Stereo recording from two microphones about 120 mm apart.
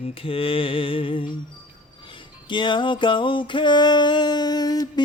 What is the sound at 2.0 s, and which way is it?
Music, 40° left (ahead or behind).